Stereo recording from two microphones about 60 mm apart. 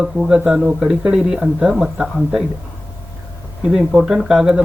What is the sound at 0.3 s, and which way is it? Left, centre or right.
Speech, centre.